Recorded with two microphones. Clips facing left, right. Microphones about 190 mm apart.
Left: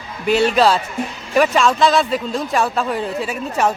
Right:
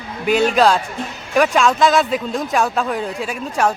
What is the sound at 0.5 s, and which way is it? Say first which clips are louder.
Speech: even; 5° left (ahead or behind).